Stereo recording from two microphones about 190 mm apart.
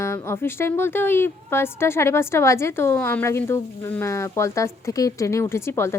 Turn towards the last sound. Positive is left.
turn(degrees=15)  # may be behind; listen again after turning